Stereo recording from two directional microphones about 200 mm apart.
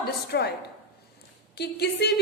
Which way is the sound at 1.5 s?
55° left (ahead or behind).